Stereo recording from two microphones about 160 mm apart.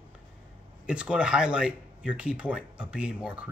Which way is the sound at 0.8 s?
5° right (ahead or behind).